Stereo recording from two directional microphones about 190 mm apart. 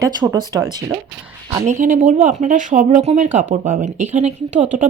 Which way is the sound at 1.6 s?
40° right (ahead or behind).